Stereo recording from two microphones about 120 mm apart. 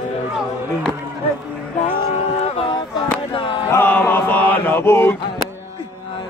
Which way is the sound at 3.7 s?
15° left (ahead or behind).